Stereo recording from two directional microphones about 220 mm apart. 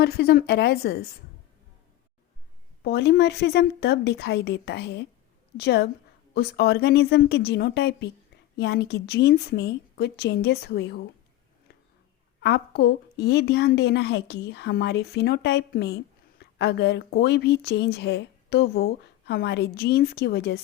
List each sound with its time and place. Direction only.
0.0 s a woman's voice: 45° left (ahead or behind)
2.8 s a woman's voice: 50° left (ahead or behind)
12.4 s a woman's voice: 50° left (ahead or behind)